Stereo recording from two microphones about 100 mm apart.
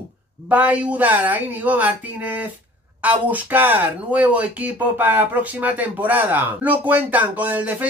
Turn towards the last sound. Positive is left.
turn(degrees=-15)  # may be behind; listen again after turning